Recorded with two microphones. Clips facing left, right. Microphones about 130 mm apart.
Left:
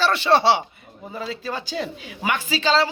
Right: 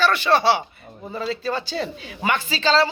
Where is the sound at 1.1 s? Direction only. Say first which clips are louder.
Right 4 dB; 10° left (ahead or behind).